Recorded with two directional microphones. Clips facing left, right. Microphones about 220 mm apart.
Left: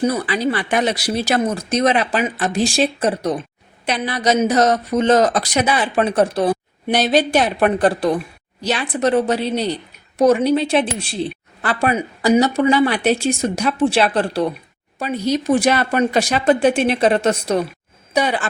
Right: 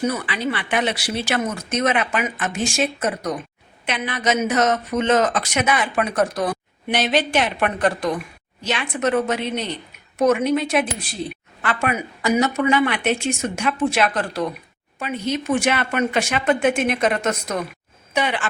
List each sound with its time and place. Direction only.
0.0 s a woman's voice: 35° left (ahead or behind)